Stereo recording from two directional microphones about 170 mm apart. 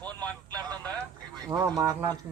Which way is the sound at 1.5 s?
20° right (ahead or behind).